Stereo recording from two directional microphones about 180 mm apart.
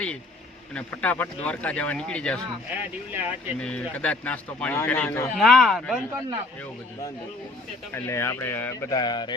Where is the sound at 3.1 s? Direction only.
10° right (ahead or behind).